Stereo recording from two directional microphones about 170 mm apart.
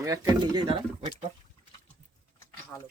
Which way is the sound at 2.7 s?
10° left (ahead or behind).